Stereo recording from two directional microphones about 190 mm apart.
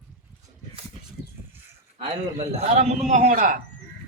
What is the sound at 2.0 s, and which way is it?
A man's voice, 30° right (ahead or behind).